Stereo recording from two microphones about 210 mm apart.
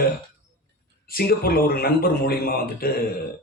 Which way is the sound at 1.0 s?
45° left (ahead or behind).